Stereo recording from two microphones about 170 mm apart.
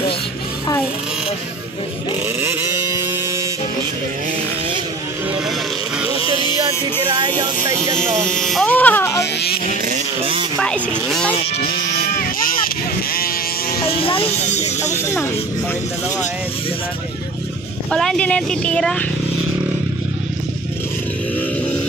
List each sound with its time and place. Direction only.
7.1 s speech: 25° right (ahead or behind)
8.3 s speech: 5° left (ahead or behind)
10.6 s speech: 5° left (ahead or behind)
12.2 s vehicle: 55° left (ahead or behind)
13.7 s speech: 30° left (ahead or behind)
17.9 s speech: 5° left (ahead or behind)